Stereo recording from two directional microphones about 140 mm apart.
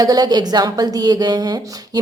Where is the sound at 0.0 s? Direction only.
30° right (ahead or behind).